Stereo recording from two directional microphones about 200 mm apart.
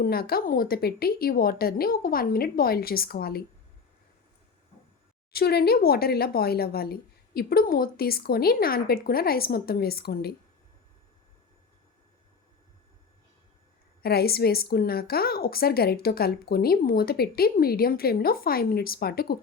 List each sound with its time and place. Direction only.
0.0 s a woman's voice: 50° left (ahead or behind)
5.3 s a woman's voice: 50° left (ahead or behind)
14.0 s a woman's voice: 50° left (ahead or behind)